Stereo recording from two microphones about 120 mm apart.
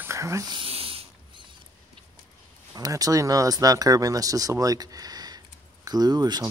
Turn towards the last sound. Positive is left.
turn(degrees=-35)  # may be behind; listen again after turning